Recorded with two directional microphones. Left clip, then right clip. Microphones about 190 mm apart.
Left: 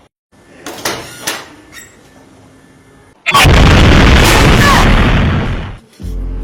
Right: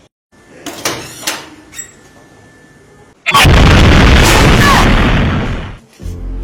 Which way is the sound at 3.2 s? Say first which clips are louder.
Even; centre (ahead or behind).